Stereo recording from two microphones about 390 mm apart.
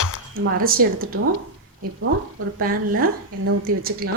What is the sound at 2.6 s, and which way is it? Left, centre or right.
Speech, right.